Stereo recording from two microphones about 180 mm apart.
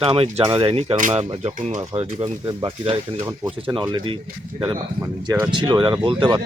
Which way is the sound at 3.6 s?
25° right (ahead or behind).